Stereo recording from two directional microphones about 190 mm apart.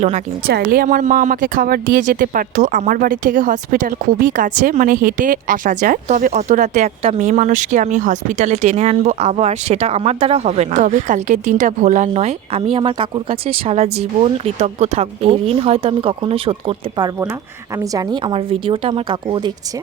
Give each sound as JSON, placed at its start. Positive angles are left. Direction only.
{"t": 0.4, "sound": "a woman's voice", "side_deg": -50}